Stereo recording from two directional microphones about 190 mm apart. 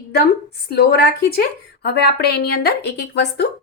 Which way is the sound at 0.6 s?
55° left (ahead or behind).